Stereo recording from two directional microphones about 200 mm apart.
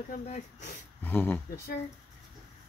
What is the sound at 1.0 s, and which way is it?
Speech, 10° left (ahead or behind).